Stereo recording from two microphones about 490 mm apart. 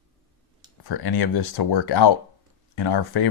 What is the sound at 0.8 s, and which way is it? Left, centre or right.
Speech, left.